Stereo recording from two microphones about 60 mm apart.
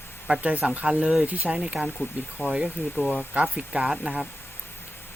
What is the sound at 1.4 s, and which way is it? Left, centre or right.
Speech, centre.